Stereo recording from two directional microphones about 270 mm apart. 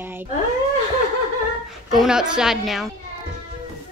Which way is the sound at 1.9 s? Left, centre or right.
Centre.